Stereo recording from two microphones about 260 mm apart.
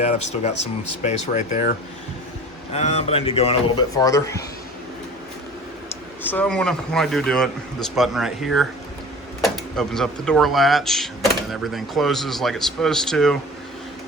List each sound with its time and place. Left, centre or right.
0.0 s speech: left
2.7 s speech: left
6.2 s speech: centre